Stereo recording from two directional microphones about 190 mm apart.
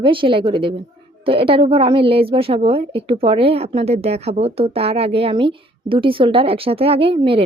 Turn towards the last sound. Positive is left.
turn(degrees=-30)  # may be behind; listen again after turning